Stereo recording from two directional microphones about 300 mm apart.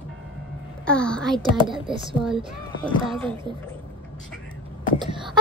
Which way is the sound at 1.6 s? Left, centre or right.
Centre.